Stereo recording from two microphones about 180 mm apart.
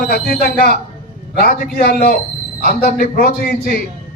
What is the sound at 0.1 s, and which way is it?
A man's voice, 60° left (ahead or behind).